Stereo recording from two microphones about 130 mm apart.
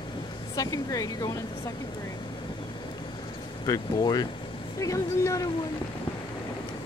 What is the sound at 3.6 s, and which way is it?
Speech, 30° left (ahead or behind).